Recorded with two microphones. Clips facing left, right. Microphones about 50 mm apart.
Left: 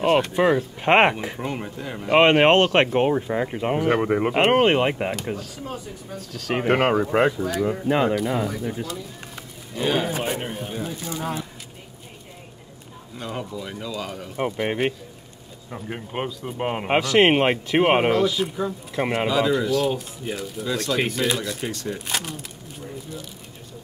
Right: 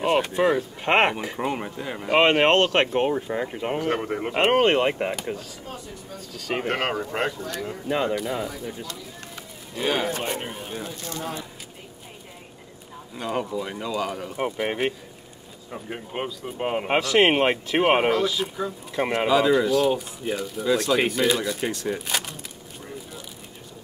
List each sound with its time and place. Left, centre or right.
0.0 s speech: centre
1.4 s speech: centre
2.0 s speech: centre
4.4 s speech: centre
6.1 s speech: centre
6.5 s speech: centre
8.1 s speech: centre
13.2 s speech: centre
14.3 s speech: centre